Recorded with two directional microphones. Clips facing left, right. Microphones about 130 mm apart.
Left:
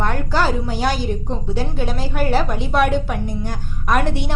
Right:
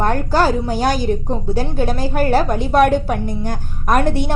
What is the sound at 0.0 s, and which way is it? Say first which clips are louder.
A woman's voice: right 4 dB; 40° right (ahead or behind).